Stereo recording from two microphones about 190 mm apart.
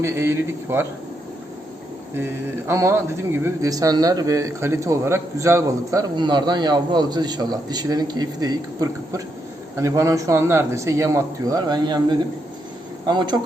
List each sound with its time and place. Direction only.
0.0 s a man's voice: 15° right (ahead or behind)
2.1 s a man's voice: 15° right (ahead or behind)